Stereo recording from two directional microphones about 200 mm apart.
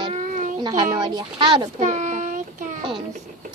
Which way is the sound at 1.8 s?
40° right (ahead or behind).